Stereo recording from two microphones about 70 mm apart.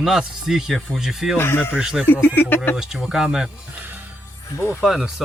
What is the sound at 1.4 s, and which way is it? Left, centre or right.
Speech, left.